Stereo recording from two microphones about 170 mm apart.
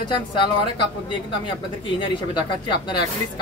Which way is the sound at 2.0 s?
25° left (ahead or behind).